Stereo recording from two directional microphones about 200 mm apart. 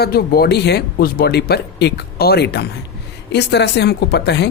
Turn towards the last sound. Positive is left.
turn(degrees=55)  # may be behind; listen again after turning